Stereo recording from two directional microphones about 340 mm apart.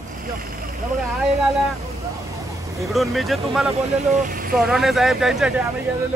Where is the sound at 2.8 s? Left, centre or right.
Centre.